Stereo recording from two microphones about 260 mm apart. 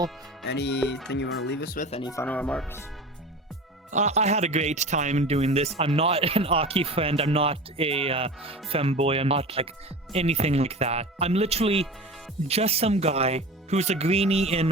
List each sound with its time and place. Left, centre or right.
0.4 s speech: left; by 2.8 s centre
3.9 s speech: right